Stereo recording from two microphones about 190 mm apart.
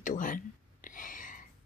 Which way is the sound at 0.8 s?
45° left (ahead or behind).